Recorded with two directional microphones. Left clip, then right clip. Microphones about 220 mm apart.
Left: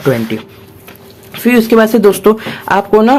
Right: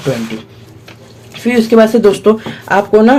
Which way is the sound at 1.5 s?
25° left (ahead or behind).